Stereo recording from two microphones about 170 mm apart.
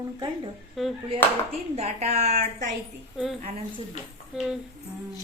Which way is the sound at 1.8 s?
40° right (ahead or behind).